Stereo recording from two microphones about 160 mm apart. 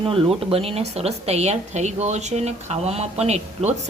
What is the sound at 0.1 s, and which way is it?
Speech, 35° right (ahead or behind).